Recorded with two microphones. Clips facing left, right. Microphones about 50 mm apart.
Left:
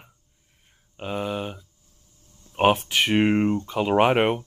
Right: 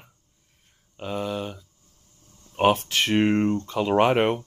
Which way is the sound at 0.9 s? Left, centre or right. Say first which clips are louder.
Left 1 dB; centre.